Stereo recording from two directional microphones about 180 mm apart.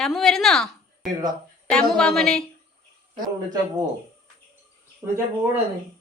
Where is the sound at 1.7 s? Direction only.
5° left (ahead or behind).